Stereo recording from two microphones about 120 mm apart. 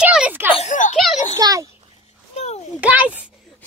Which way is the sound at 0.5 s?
80° left.